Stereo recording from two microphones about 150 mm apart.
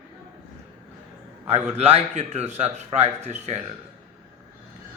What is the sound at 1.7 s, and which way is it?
Speech, 45° right (ahead or behind).